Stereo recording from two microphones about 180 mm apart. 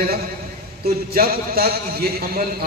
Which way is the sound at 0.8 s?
55° right (ahead or behind).